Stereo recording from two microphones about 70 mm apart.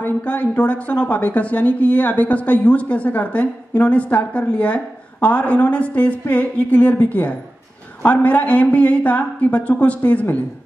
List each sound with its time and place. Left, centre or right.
0.2 s a woman's voice: centre